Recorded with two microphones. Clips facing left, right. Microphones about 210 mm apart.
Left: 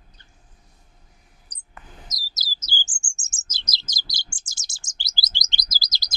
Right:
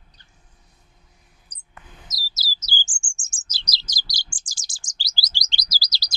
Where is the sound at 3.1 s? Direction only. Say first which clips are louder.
Even; 20° left (ahead or behind).